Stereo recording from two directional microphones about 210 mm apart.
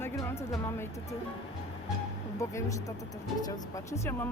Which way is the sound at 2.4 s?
15° left (ahead or behind).